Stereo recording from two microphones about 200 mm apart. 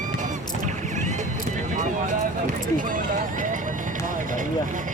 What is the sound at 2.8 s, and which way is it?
Speech, 40° right (ahead or behind).